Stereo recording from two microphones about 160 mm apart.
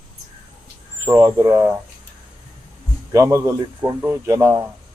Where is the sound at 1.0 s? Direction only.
20° right (ahead or behind).